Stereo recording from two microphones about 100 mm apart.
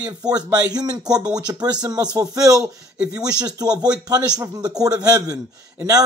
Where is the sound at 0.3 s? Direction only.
40° right (ahead or behind).